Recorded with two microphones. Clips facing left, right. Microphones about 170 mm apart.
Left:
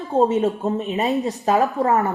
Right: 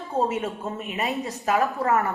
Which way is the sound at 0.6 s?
35° left (ahead or behind).